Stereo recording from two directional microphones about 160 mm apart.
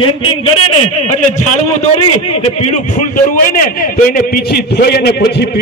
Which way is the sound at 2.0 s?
40° left (ahead or behind).